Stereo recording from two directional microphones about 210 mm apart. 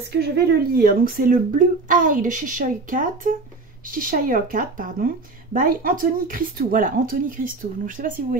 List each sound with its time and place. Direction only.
0.0 s speech: 50° right (ahead or behind)